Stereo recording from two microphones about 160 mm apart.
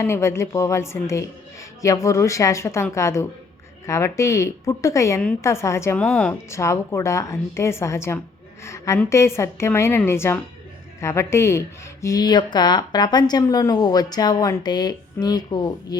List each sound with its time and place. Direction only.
0.0 s a woman's voice: 15° left (ahead or behind)
6.1 s speech: 5° left (ahead or behind)
6.5 s a woman's voice: 15° left (ahead or behind)